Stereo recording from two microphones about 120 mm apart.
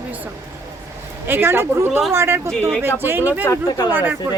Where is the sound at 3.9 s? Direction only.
15° right (ahead or behind).